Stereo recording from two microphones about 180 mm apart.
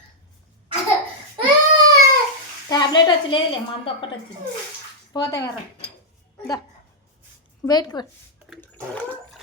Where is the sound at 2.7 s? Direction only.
25° left (ahead or behind).